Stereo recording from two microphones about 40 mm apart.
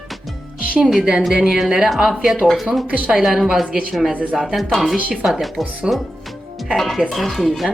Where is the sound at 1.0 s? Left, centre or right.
Right.